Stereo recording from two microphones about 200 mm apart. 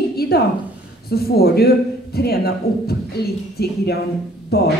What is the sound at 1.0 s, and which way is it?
Speech, 50° left (ahead or behind).